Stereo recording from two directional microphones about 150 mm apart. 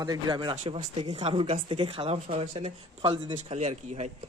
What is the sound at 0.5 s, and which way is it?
Speech, 50° right (ahead or behind).